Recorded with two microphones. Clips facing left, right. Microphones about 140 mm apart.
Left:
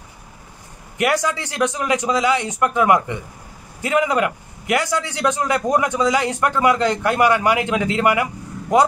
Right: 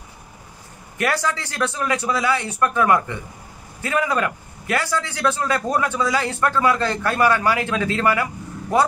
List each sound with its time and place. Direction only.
0.9 s a man's voice: 15° left (ahead or behind)